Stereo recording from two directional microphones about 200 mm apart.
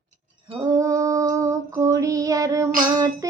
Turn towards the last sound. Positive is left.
turn(degrees=-20)  # may be behind; listen again after turning